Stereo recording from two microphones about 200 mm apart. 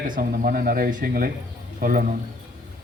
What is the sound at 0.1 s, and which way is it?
Speech, 45° right (ahead or behind).